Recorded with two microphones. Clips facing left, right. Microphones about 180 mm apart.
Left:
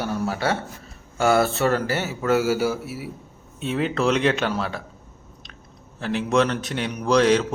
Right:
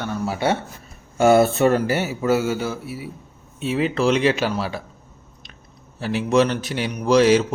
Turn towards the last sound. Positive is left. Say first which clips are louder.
# right 3 dB
turn(degrees=-5)  # may be behind; listen again after turning